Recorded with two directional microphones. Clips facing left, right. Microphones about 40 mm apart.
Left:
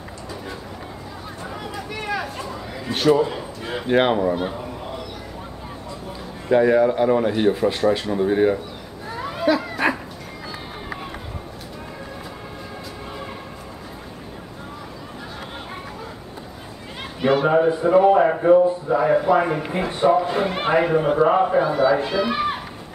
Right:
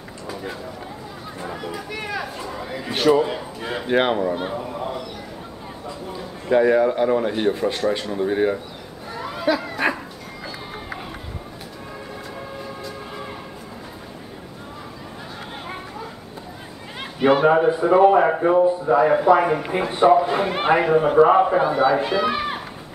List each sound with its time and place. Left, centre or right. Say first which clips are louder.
1.4 s a man's voice: right 2 dB; centre
3.8 s a man's voice: left 2 dB; centre
6.5 s a man's voice: left 1 dB; centre
9.0 s dog: left 2 dB; centre
17.2 s a man's voice: right 2 dB; centre
19.9 s a man's voice: right 3 dB; centre